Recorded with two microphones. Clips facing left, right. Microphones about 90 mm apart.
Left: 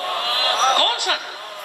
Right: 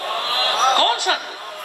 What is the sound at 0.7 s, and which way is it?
Speech, 25° right (ahead or behind).